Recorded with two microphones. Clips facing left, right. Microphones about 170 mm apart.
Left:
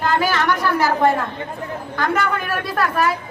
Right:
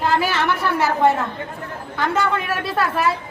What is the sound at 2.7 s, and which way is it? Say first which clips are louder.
Speech: left 1 dB; 25° right (ahead or behind).